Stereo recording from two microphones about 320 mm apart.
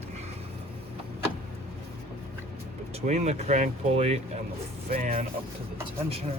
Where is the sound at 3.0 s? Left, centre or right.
Centre.